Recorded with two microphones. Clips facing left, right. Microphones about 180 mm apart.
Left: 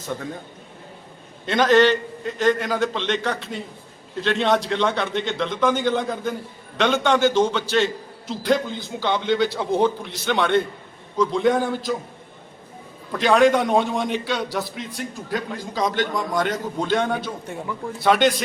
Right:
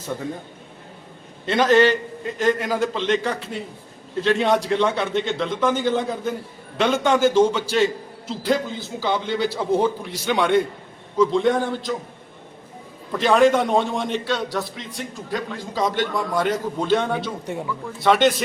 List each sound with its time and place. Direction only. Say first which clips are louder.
1.5 s a man's voice: even; 5° right (ahead or behind)
13.1 s a man's voice: even; centre (ahead or behind)